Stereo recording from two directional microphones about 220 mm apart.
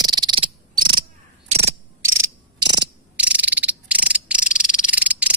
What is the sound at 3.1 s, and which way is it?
Insect, 5° right (ahead or behind).